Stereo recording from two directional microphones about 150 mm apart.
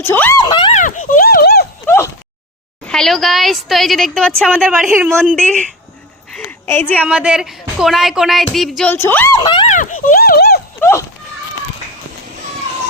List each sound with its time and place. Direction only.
0.0 s a woman's voice: 15° left (ahead or behind)
0.4 s speech: 30° left (ahead or behind)
0.7 s a sound: 55° left (ahead or behind); by 1.6 s 85° left
2.8 s a woman's voice: 5° left (ahead or behind)
4.9 s a woman's voice: 15° right (ahead or behind)
5.4 s a woman's voice: 5° left (ahead or behind)
6.4 s a sound: 15° left (ahead or behind)
7.0 s a woman's voice: 5° right (ahead or behind)
8.9 s a woman's voice: 15° left (ahead or behind)
9.4 s speech: 35° left (ahead or behind)
9.6 s speech: 60° left (ahead or behind); by 10.6 s 90° left
10.8 s horse: 15° left (ahead or behind)